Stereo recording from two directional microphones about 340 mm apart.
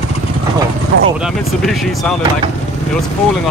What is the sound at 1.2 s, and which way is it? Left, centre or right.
Speech, centre.